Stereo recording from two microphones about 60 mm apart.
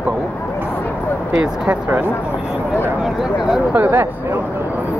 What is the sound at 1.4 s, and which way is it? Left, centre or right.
Speech, right.